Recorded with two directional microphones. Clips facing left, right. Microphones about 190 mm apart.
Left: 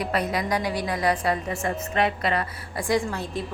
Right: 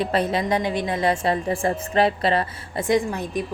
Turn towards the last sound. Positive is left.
turn(degrees=-15)  # may be behind; listen again after turning